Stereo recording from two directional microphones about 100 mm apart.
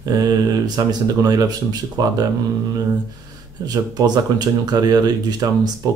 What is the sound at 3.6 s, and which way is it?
Speech, 40° right (ahead or behind).